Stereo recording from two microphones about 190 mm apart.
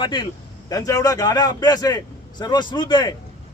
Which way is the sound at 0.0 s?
25° left (ahead or behind).